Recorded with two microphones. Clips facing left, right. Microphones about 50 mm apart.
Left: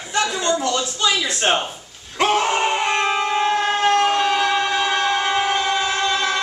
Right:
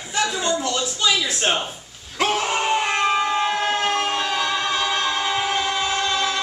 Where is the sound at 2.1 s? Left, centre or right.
Centre.